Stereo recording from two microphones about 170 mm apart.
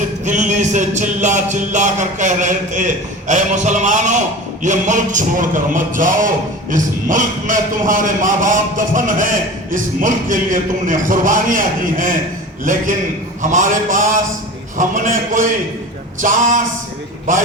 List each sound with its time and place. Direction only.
0.3 s a man's voice: 45° right (ahead or behind)